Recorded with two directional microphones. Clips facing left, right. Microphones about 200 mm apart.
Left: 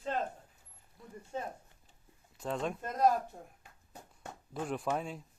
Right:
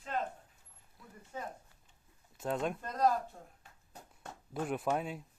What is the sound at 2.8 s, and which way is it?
Speech, 20° left (ahead or behind).